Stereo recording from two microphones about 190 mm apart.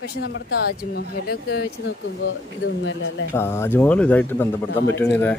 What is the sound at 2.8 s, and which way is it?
Speech, 75° left (ahead or behind).